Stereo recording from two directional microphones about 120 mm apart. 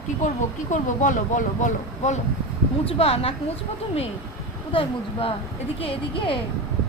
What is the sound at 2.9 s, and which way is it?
Speech, 55° left (ahead or behind).